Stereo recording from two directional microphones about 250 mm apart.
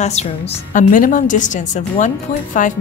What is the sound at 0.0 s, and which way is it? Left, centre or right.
A woman's voice, left.